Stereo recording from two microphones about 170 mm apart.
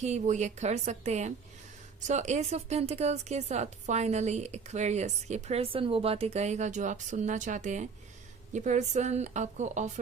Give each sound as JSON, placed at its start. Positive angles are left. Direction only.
{"t": 0.0, "sound": "speech", "side_deg": -45}